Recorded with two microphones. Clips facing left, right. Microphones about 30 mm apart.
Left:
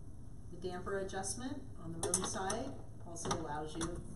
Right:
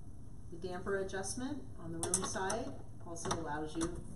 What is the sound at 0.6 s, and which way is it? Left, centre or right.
A woman's voice, centre.